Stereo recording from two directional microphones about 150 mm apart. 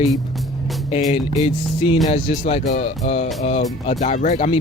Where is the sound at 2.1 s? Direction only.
45° left (ahead or behind).